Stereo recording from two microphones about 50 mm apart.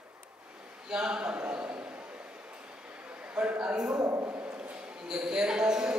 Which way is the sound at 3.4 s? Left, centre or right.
Centre.